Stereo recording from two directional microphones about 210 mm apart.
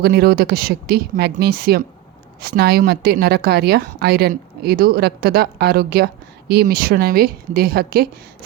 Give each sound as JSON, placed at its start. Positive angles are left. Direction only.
{"t": 0.0, "sound": "a woman's voice", "side_deg": -50}